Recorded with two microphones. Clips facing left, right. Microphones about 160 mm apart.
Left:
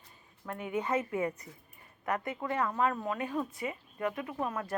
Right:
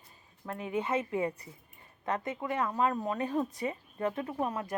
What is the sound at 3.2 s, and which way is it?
A woman's voice, 35° right (ahead or behind).